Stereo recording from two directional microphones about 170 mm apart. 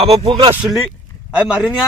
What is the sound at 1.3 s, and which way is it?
Speech, 5° right (ahead or behind).